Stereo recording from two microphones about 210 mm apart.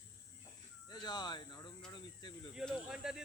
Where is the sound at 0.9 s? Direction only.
20° left (ahead or behind).